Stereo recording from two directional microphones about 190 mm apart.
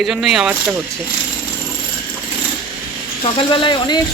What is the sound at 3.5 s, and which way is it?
Speech, 25° left (ahead or behind).